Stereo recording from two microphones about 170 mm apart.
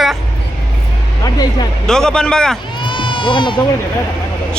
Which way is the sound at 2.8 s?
30° left (ahead or behind).